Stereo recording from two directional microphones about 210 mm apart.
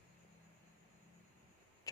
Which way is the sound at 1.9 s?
15° left (ahead or behind).